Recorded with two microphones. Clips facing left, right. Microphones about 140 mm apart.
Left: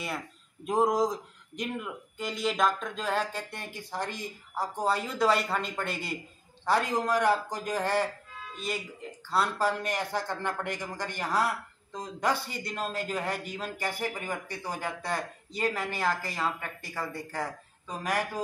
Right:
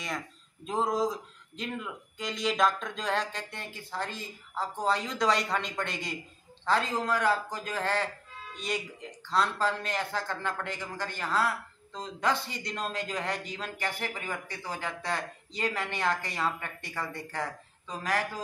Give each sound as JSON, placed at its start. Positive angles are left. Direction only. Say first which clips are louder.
{"t": 0.7, "sound": "a man's voice", "louder": "left 3 dB", "side_deg": 15}
{"t": 8.5, "sound": "a man's voice", "louder": "right 1 dB", "side_deg": 5}